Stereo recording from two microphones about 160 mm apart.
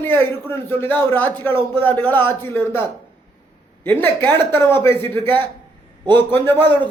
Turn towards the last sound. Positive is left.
turn(degrees=10)  # may be behind; listen again after turning